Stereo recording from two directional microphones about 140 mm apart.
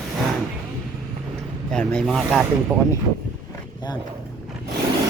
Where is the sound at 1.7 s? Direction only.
5° left (ahead or behind).